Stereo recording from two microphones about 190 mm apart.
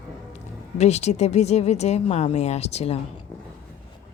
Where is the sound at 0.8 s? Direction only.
35° left (ahead or behind).